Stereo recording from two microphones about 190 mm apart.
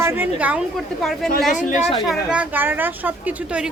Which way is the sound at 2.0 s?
5° right (ahead or behind).